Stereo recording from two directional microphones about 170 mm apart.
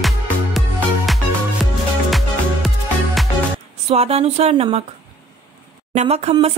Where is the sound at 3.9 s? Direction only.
35° right (ahead or behind).